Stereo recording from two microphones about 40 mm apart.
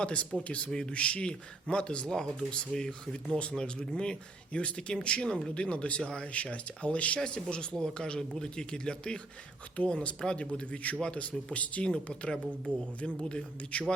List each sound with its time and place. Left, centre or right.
0.0 s a man's voice: left
0.7 s a man's voice: centre
0.9 s a man's voice: left
2.0 s a man's voice: centre
6.3 s speech: left
7.5 s a man's voice: centre; by 11.9 s left
11.9 s a man's voice: left